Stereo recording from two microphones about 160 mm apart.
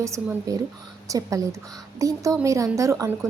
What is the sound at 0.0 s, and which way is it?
A woman's voice, 20° right (ahead or behind).